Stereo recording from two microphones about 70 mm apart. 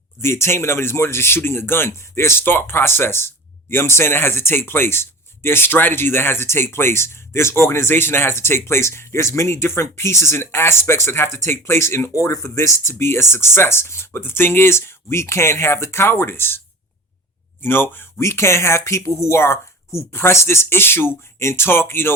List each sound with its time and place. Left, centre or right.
0.2 s speech: left
17.6 s a woman's voice: left